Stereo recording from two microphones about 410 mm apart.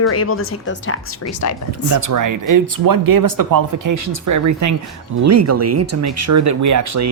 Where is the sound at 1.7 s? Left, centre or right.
Right.